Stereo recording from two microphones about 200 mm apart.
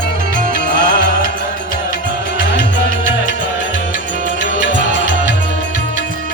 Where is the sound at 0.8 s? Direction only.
45° right (ahead or behind).